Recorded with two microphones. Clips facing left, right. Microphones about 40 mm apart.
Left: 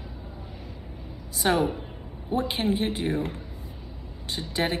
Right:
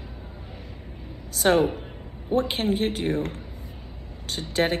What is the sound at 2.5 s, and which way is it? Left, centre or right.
Speech, right.